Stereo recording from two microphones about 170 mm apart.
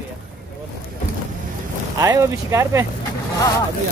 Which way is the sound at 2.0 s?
20° right (ahead or behind).